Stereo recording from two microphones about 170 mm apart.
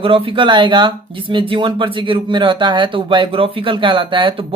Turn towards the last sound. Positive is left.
turn(degrees=-30)  # may be behind; listen again after turning